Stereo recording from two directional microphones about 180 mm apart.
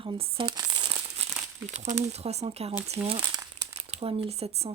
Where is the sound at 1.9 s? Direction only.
35° right (ahead or behind).